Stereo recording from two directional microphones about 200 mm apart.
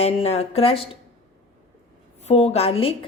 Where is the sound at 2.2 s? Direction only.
30° left (ahead or behind).